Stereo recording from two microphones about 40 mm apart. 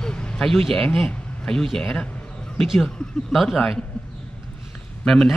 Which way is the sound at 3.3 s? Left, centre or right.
Centre.